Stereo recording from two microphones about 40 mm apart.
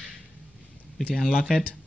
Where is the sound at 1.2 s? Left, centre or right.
Left.